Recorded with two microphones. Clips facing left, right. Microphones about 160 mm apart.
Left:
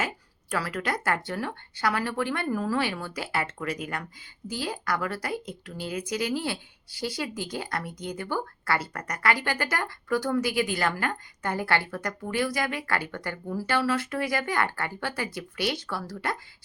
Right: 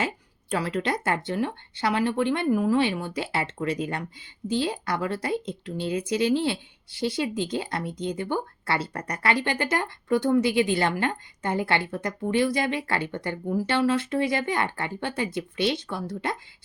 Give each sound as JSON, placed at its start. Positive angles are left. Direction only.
{"t": 0.5, "sound": "a woman's voice", "side_deg": -25}